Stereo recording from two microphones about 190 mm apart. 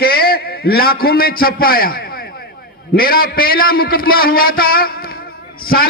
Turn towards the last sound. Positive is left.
turn(degrees=50)  # may be behind; listen again after turning